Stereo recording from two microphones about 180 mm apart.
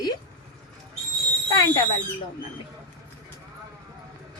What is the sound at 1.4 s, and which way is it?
Speech, 20° left (ahead or behind).